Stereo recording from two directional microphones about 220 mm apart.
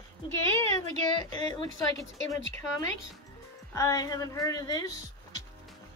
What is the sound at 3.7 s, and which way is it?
Speech, 15° left (ahead or behind).